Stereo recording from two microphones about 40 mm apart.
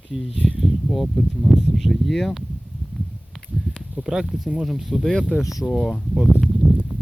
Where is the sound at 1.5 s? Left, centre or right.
Centre.